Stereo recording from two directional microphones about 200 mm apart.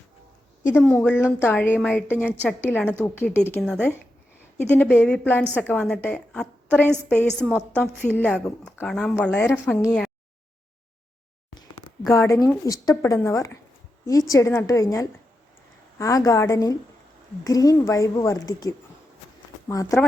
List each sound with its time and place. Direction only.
0.6 s a woman's voice: 10° left (ahead or behind)
12.1 s a woman's voice: 15° left (ahead or behind)